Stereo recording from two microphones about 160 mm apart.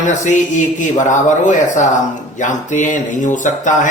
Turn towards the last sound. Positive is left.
turn(degrees=50)  # may be behind; listen again after turning